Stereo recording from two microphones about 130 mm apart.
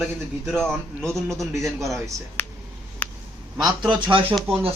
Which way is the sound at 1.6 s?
Centre (ahead or behind).